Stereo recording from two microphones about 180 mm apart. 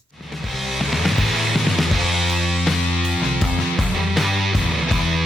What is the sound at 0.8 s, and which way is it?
Music, centre (ahead or behind).